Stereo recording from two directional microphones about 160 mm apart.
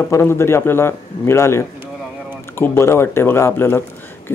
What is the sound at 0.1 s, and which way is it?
Speech, 15° left (ahead or behind).